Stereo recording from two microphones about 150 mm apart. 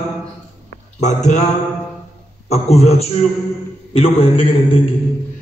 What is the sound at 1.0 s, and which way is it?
Mantra, 50° left (ahead or behind).